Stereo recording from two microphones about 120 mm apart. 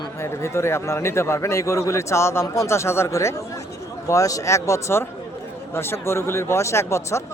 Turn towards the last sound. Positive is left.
turn(degrees=25)  # may be behind; listen again after turning